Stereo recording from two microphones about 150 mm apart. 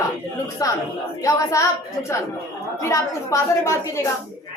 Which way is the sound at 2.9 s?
20° left (ahead or behind).